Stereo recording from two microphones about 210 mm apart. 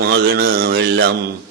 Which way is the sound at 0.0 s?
50° right (ahead or behind).